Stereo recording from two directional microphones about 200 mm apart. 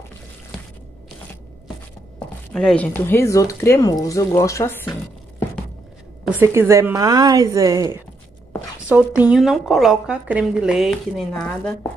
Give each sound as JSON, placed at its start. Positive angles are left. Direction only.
{"t": 2.1, "sound": "speech", "side_deg": 5}
{"t": 6.2, "sound": "a woman's voice", "side_deg": -10}